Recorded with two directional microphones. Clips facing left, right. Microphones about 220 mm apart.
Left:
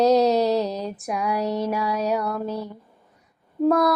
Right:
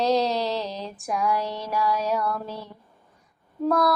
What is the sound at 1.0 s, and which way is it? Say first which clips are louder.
Mantra: right 3 dB; 20° left (ahead or behind).